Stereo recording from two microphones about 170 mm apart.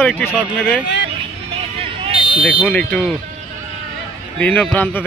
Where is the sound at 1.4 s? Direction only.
35° right (ahead or behind).